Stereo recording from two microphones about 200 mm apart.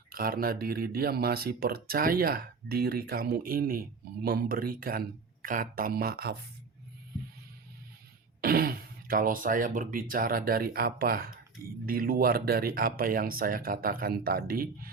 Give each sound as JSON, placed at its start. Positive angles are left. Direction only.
{"t": 0.1, "sound": "speech", "side_deg": -45}
{"t": 8.4, "sound": "speech", "side_deg": -45}